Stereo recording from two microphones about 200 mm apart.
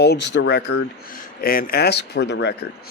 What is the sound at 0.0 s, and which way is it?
Speech, 60° left (ahead or behind).